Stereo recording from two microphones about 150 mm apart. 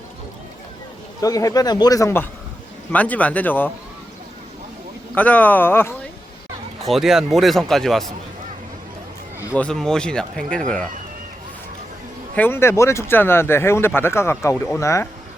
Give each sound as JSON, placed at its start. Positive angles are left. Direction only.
{"t": 1.2, "sound": "speech", "side_deg": 25}
{"t": 5.1, "sound": "speech", "side_deg": 10}
{"t": 6.8, "sound": "speech", "side_deg": 0}
{"t": 9.6, "sound": "speech", "side_deg": 5}
{"t": 12.4, "sound": "speech", "side_deg": 15}